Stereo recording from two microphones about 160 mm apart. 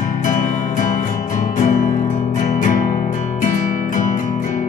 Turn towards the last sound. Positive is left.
turn(degrees=50)  # may be behind; listen again after turning